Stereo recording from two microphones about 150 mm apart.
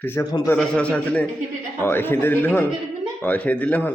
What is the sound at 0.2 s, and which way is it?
Speech, 20° left (ahead or behind).